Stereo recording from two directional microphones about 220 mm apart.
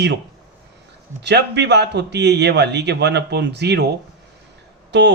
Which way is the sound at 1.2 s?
50° right (ahead or behind).